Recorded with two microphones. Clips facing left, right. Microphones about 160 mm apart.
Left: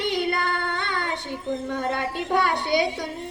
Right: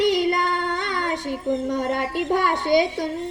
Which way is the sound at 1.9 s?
45° right (ahead or behind).